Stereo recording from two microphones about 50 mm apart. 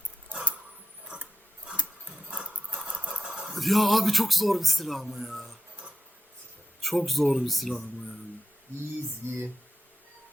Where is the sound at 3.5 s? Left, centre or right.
Centre.